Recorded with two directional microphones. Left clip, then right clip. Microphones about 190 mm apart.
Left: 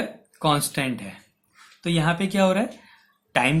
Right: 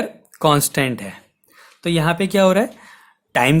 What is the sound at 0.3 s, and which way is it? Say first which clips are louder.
Speech: right 6 dB; 55° right (ahead or behind).